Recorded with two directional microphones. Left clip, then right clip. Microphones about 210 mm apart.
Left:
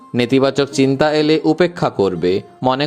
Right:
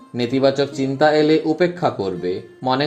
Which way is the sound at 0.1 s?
30° left (ahead or behind).